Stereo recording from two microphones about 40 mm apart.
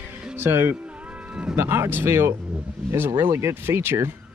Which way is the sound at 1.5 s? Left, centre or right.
Right.